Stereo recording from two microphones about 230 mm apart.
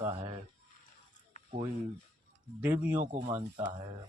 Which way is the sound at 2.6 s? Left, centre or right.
Centre.